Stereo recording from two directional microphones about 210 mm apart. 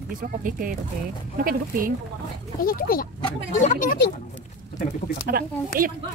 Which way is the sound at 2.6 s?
45° left (ahead or behind).